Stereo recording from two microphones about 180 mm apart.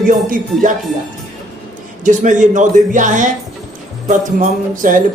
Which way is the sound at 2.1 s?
45° right (ahead or behind).